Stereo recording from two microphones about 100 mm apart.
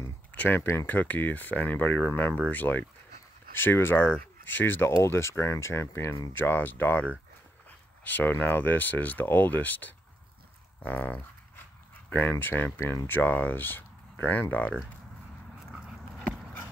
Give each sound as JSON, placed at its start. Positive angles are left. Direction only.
{"t": 0.4, "sound": "speech", "side_deg": 20}
{"t": 6.3, "sound": "speech", "side_deg": 20}
{"t": 10.8, "sound": "dog", "side_deg": 15}
{"t": 12.1, "sound": "speech", "side_deg": 20}